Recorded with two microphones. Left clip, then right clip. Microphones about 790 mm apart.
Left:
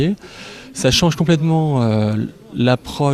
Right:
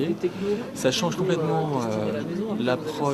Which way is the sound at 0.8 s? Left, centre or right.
Left.